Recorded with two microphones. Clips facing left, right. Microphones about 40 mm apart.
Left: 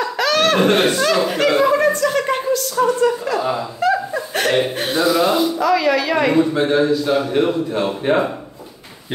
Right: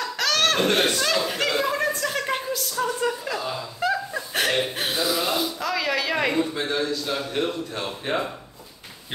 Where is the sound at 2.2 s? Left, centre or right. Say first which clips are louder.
Left 8 dB; centre.